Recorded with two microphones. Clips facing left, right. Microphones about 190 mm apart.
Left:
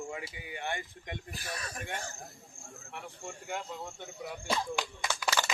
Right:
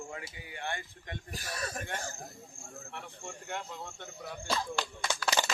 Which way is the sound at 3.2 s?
5° left (ahead or behind).